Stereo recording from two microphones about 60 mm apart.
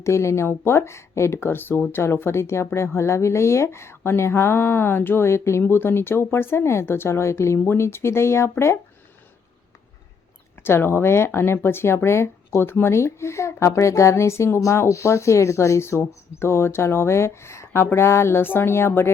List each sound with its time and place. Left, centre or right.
0.0 s speech: left
10.6 s speech: left